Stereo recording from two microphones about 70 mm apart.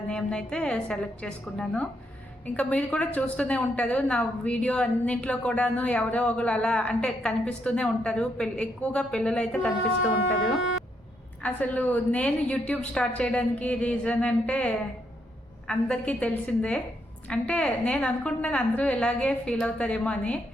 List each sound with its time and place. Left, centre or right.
0.1 s a woman's voice: centre
11.4 s a woman's voice: left